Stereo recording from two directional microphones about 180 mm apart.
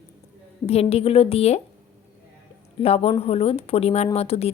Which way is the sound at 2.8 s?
35° left (ahead or behind).